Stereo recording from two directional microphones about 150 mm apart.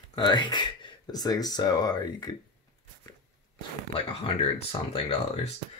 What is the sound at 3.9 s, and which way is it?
Speech, 40° left (ahead or behind).